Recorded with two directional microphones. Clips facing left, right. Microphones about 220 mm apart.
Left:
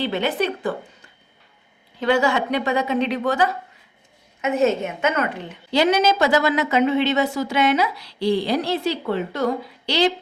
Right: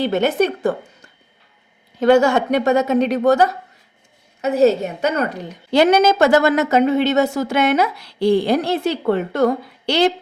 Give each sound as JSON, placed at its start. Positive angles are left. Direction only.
{"t": 0.0, "sound": "a woman's voice", "side_deg": -45}
{"t": 2.0, "sound": "a woman's voice", "side_deg": -45}